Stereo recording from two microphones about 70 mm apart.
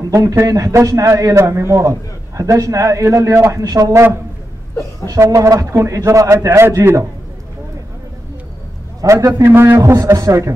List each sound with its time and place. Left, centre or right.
0.1 s a man's voice: right
5.0 s a man's voice: right
6.6 s a man's voice: right
9.0 s a man's voice: right
9.4 s a man's voice: right
9.8 s a man's voice: right